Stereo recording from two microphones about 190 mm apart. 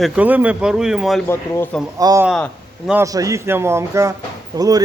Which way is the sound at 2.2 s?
Centre (ahead or behind).